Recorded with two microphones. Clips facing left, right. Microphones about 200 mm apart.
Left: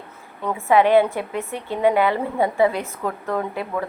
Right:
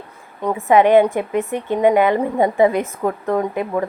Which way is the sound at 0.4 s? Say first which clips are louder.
Right 3 dB; 15° right (ahead or behind).